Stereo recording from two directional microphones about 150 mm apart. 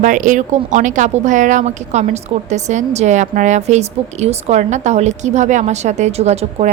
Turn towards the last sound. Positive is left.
turn(degrees=-45)  # may be behind; listen again after turning